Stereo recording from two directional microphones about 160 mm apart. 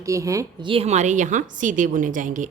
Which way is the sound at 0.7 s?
40° right (ahead or behind).